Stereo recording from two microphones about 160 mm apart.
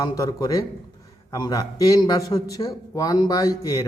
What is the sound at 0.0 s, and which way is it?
A man's voice, 20° left (ahead or behind).